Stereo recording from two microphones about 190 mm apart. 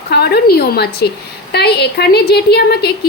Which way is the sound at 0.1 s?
55° left (ahead or behind).